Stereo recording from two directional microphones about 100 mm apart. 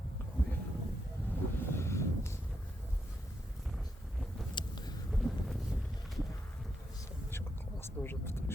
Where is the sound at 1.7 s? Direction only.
25° left (ahead or behind).